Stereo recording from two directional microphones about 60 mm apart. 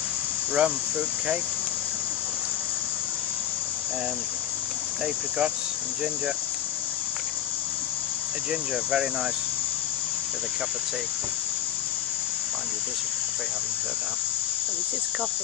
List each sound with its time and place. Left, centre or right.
0.6 s cricket: centre